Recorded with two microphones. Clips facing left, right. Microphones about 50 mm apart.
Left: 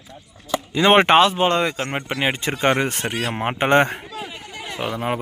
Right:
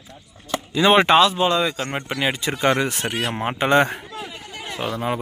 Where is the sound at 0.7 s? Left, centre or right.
Left.